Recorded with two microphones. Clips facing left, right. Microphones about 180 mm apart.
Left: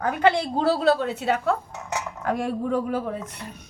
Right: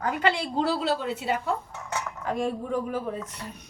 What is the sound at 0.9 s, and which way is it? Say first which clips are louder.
A woman's voice: left 4 dB; 65° left (ahead or behind).